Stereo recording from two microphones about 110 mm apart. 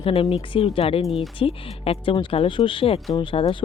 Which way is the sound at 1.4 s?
60° left (ahead or behind).